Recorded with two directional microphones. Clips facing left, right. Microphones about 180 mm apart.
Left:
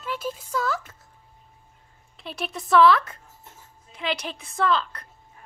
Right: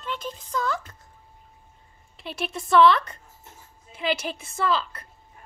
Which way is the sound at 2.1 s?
Centre (ahead or behind).